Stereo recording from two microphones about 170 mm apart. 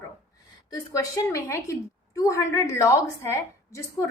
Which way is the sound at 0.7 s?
20° left (ahead or behind).